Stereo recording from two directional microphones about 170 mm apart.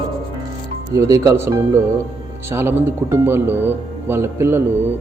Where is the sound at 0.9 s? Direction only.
20° right (ahead or behind).